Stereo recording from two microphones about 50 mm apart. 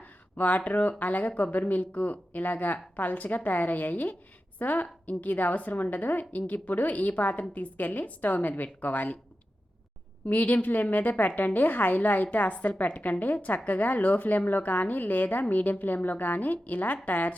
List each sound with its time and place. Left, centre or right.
0.3 s a woman's voice: left
10.2 s a woman's voice: left